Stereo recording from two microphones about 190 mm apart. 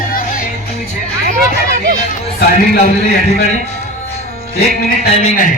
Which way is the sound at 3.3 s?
35° left (ahead or behind).